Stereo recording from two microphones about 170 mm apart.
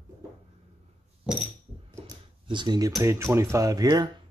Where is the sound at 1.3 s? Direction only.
5° right (ahead or behind).